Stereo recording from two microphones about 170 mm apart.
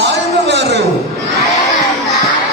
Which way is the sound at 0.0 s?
90° right.